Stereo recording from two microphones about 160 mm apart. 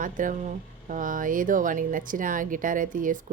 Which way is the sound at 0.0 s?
55° right (ahead or behind).